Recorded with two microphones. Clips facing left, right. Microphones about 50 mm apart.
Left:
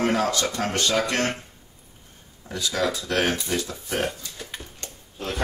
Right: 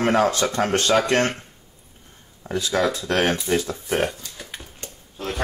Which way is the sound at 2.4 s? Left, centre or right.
Right.